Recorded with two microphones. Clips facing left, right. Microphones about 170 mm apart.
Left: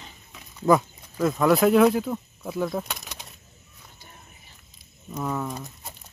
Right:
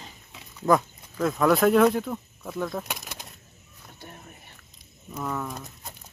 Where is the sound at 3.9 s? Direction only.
60° right (ahead or behind).